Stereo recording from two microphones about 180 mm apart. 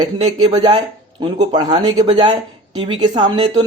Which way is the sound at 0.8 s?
35° right (ahead or behind).